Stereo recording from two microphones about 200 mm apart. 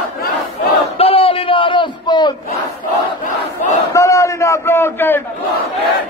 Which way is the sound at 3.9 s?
15° left (ahead or behind).